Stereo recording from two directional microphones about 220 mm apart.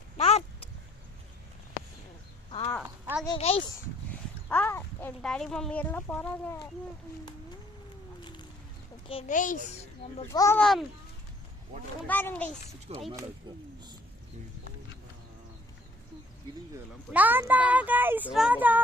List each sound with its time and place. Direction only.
0.2 s a sound: 30° left (ahead or behind)
2.5 s a sound: 25° left (ahead or behind)
2.8 s a sound: 10° right (ahead or behind)
3.2 s speech: 25° left (ahead or behind)
4.4 s speech: 10° left (ahead or behind)
8.2 s a sound: 20° left (ahead or behind)
9.0 s a child's voice: 30° left (ahead or behind)
10.2 s a child's voice: 15° left (ahead or behind)
10.6 s a child's voice: centre (ahead or behind)
12.0 s a child's voice: 10° left (ahead or behind)
12.9 s speech: 30° right (ahead or behind)
17.1 s speech: 10° right (ahead or behind)